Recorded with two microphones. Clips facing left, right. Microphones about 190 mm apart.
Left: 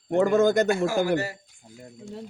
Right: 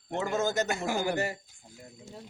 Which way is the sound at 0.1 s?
55° left (ahead or behind).